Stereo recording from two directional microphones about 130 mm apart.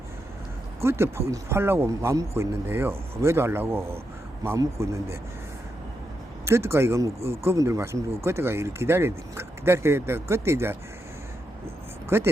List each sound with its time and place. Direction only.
0.8 s speech: 20° right (ahead or behind)
6.4 s speech: 20° right (ahead or behind)
12.0 s speech: 20° right (ahead or behind)